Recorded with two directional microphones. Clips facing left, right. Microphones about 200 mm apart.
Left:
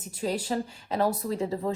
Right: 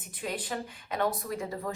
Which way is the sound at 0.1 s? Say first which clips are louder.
Left 6 dB; 30° left (ahead or behind).